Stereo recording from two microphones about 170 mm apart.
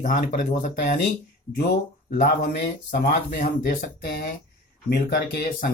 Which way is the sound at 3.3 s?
65° left (ahead or behind).